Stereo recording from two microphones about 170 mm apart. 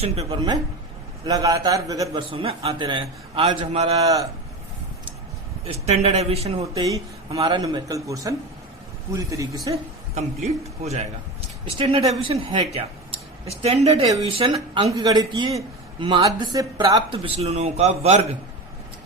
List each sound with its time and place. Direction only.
0.0 s a man's voice: 35° right (ahead or behind); by 2.2 s 20° right (ahead or behind)
2.3 s a man's voice: 35° right (ahead or behind)
3.9 s a woman's voice: 20° right (ahead or behind)
5.6 s a man's voice: 40° right (ahead or behind)
6.8 s a woman's voice: 20° right (ahead or behind)
10.2 s a man's voice: 40° right (ahead or behind)